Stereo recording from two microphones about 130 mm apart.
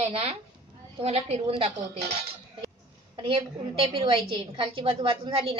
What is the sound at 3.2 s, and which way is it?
A woman's voice, 50° right (ahead or behind).